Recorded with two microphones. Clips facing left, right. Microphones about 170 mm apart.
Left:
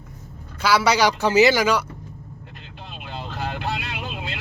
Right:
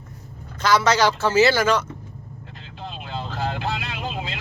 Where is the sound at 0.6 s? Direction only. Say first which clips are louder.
Even; 10° left (ahead or behind).